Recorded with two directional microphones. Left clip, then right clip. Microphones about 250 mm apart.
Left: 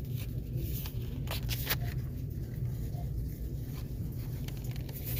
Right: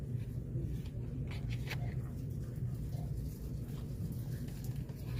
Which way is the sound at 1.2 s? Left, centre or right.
Left.